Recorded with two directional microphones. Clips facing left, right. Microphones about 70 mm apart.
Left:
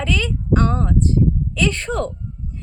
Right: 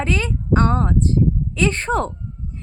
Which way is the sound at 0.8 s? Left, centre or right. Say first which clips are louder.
Even; right.